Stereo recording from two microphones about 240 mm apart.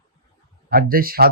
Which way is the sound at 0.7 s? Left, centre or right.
Right.